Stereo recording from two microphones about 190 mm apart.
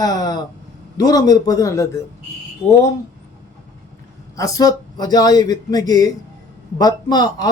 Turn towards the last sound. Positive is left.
turn(degrees=20)  # may be behind; listen again after turning